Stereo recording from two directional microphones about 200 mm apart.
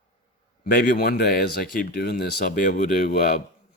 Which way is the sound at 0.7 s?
50° left (ahead or behind).